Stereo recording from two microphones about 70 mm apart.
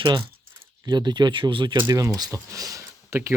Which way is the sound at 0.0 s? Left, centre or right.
Right.